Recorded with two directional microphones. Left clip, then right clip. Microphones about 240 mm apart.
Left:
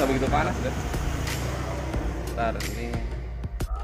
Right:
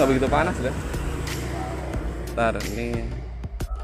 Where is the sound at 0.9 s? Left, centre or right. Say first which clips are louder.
Even; centre.